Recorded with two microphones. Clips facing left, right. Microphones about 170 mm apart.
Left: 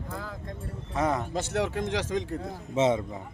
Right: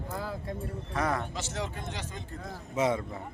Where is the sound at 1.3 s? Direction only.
60° left (ahead or behind); by 2.2 s 90° left.